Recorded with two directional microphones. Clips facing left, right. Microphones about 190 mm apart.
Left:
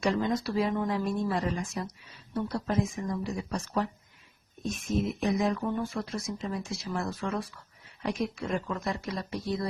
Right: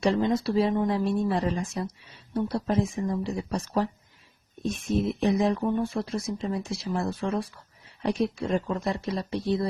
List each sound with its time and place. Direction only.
0.0 s speech: 30° right (ahead or behind)